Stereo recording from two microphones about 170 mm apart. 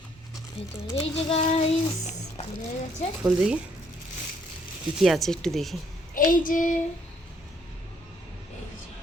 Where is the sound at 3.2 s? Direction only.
5° right (ahead or behind).